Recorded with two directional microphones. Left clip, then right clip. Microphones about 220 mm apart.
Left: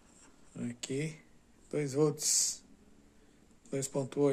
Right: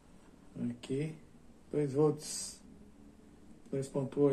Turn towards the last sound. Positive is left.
turn(degrees=55)  # may be behind; listen again after turning